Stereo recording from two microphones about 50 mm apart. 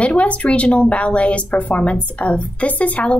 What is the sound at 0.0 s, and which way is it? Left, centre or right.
Speech, left.